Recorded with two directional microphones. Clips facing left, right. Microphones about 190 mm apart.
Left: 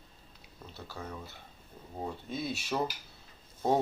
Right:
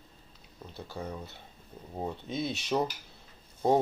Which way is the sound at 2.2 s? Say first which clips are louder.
Right 3 dB; 20° right (ahead or behind).